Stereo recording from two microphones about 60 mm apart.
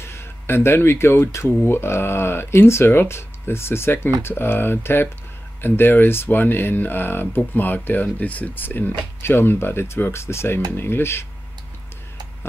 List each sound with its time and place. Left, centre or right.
0.0 s speech: left